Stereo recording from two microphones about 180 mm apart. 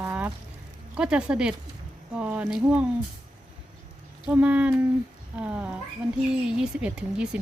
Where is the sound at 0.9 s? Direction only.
5° right (ahead or behind).